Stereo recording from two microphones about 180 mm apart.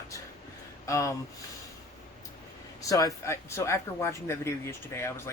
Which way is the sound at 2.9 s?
20° left (ahead or behind).